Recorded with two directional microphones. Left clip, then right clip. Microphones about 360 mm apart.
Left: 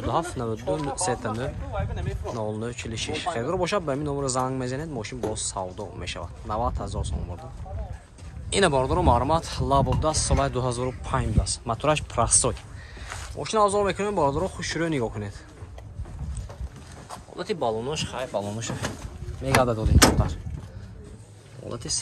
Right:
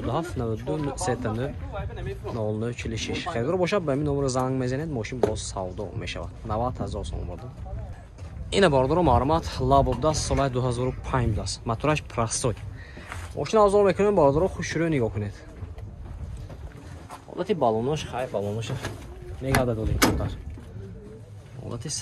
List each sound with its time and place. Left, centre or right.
0.0 s speech: centre
1.7 s speech: left
2.3 s speech: centre
8.5 s speech: centre
17.4 s speech: centre